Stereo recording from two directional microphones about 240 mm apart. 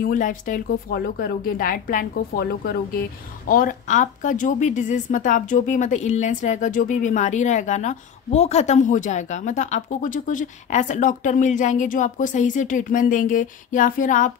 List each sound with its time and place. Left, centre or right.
0.0 s a woman's voice: left